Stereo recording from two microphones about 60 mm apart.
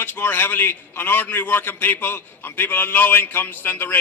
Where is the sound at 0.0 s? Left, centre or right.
Left.